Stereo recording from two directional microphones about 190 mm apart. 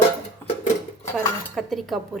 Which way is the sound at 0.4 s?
10° left (ahead or behind).